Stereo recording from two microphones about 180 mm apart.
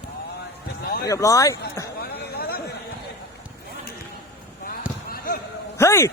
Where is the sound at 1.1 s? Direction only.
20° left (ahead or behind).